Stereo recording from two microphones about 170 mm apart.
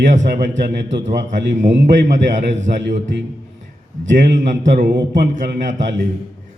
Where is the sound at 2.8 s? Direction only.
90° right.